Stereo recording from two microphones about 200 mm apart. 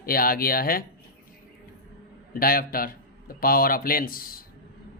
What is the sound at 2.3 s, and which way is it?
Speech, 45° left (ahead or behind).